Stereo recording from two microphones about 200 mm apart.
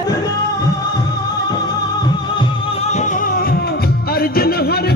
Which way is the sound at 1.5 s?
20° left (ahead or behind).